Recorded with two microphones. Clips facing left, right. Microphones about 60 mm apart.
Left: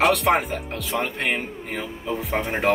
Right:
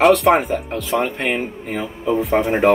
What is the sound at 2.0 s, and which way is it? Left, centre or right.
Speech, centre.